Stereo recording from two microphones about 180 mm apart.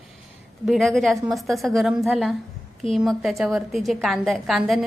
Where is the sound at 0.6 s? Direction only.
Centre (ahead or behind).